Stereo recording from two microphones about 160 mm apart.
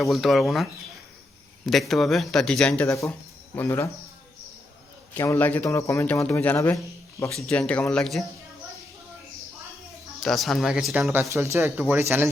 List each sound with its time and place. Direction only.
0.0 s speech: centre (ahead or behind)
2.9 s speech: 15° left (ahead or behind)
5.1 s speech: 15° left (ahead or behind)
10.2 s speech: centre (ahead or behind)
11.1 s speech: 15° right (ahead or behind)